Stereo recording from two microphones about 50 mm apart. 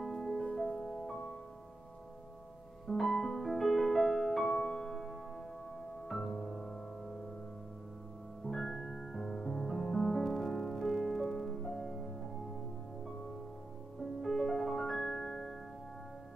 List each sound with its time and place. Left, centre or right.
0.0 s music: centre
2.9 s music: centre
8.5 s music: centre
14.2 s music: centre